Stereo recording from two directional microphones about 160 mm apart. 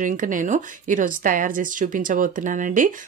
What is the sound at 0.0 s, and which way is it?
A woman's voice, 55° right (ahead or behind).